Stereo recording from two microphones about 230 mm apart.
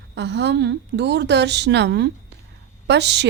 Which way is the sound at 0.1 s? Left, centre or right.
Right.